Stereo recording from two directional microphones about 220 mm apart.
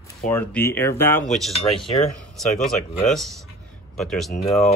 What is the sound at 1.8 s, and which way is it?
Speech, 25° left (ahead or behind).